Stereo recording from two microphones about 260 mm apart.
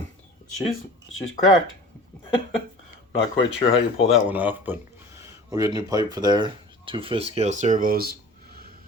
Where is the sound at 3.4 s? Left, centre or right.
Left.